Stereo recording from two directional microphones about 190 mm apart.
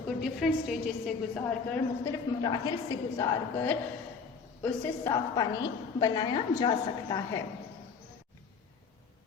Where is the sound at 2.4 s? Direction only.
20° left (ahead or behind).